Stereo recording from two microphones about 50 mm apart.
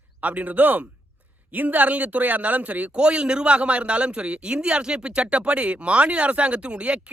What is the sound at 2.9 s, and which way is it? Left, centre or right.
A man's voice, centre.